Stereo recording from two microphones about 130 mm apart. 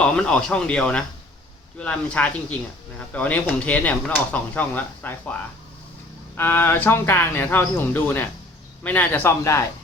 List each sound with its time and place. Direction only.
0.0 s speech: 5° left (ahead or behind)
6.3 s speech: 15° left (ahead or behind)